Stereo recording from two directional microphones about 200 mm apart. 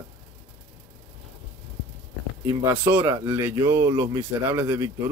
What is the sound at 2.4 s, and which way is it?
Speech, 15° right (ahead or behind).